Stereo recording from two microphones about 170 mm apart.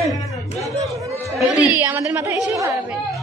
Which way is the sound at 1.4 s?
5° right (ahead or behind).